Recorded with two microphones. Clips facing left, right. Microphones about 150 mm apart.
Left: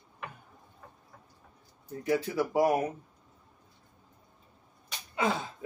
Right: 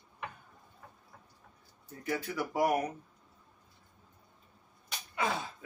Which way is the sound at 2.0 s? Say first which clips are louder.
Left 6 dB; 25° left (ahead or behind).